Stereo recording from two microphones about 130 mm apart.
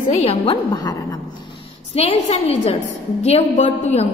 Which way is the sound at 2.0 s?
50° left (ahead or behind).